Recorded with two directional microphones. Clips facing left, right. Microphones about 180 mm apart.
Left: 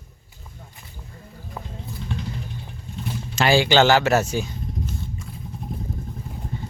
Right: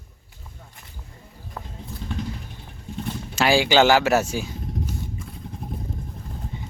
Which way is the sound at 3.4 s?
5° right (ahead or behind).